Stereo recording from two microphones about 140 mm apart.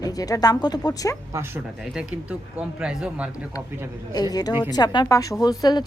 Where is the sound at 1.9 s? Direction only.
10° right (ahead or behind).